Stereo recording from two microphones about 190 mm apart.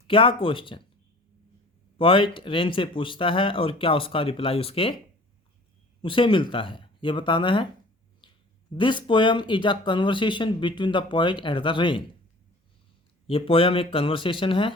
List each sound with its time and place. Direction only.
0.1 s speech: 25° left (ahead or behind)
2.0 s speech: 25° left (ahead or behind)
6.0 s speech: 25° left (ahead or behind)
8.7 s speech: 25° left (ahead or behind)
13.2 s speech: 30° left (ahead or behind)